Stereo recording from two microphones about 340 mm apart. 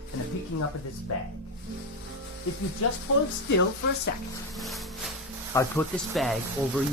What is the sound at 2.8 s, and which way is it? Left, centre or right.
Speech, left.